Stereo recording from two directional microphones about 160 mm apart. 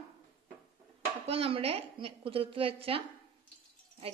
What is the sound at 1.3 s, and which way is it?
A woman's voice, 35° right (ahead or behind).